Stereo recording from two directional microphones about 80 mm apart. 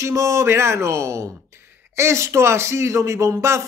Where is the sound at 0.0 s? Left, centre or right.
Right.